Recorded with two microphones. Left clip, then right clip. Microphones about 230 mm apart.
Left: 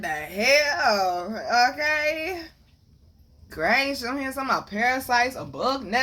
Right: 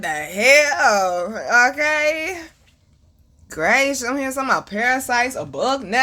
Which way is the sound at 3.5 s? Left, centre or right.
Right.